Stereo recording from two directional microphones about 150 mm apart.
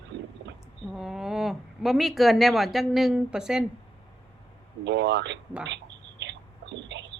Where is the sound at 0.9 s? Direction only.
5° right (ahead or behind).